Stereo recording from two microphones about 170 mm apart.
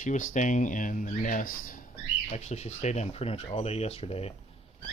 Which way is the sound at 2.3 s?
40° left (ahead or behind).